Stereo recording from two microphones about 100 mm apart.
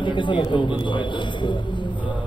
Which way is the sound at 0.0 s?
55° left (ahead or behind).